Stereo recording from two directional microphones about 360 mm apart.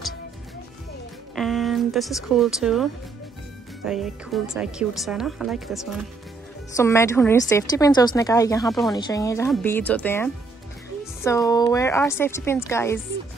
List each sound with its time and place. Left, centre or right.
1.3 s a woman's voice: centre